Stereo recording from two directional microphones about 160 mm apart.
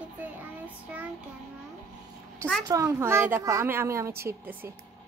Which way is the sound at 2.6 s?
20° right (ahead or behind).